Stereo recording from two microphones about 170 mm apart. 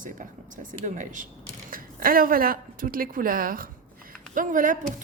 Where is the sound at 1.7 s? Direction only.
60° right (ahead or behind).